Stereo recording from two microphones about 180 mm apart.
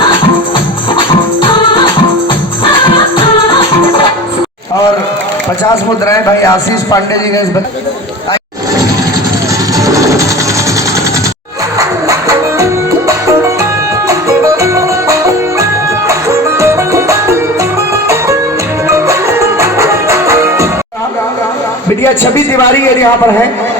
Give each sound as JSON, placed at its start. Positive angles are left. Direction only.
{"t": 0.9, "sound": "music", "side_deg": 30}
{"t": 9.7, "sound": "music", "side_deg": -20}
{"t": 14.1, "sound": "music", "side_deg": -15}
{"t": 18.9, "sound": "music", "side_deg": -15}
{"t": 22.0, "sound": "a man's voice", "side_deg": 10}